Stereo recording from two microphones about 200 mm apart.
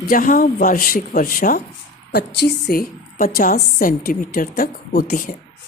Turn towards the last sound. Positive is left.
turn(degrees=45)  # may be behind; listen again after turning